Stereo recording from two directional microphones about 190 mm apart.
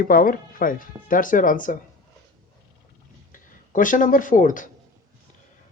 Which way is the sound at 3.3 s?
45° left (ahead or behind).